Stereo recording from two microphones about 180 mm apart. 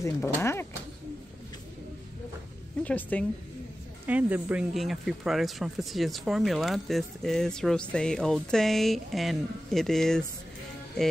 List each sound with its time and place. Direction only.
0.0 s speech: 15° left (ahead or behind)
2.8 s speech: 10° left (ahead or behind)
4.0 s speech: 10° right (ahead or behind)